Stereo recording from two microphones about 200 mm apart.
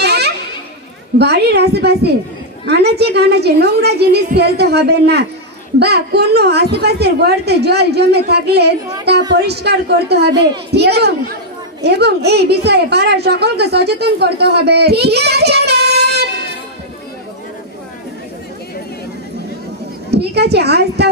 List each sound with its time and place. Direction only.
0.0 s children playing: 55° right (ahead or behind)
1.1 s a woman's voice: 55° right (ahead or behind)
20.1 s a woman's voice: 55° right (ahead or behind)